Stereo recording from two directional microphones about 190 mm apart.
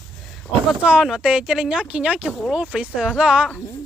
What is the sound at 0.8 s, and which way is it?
Speech, 5° right (ahead or behind).